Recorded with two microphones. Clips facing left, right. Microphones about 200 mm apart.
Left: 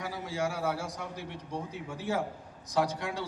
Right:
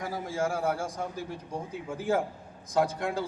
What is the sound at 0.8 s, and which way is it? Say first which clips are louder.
A man's voice: right 4 dB; 50° right (ahead or behind).